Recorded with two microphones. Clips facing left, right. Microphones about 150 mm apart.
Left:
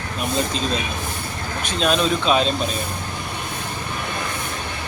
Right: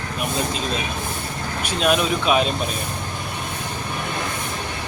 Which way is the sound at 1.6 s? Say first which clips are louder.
Even; 10° right (ahead or behind).